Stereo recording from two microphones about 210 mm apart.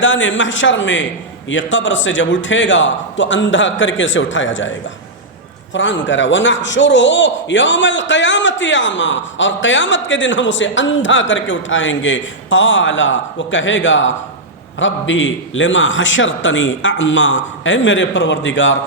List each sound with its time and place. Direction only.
0.0 s a man's voice: 60° left (ahead or behind)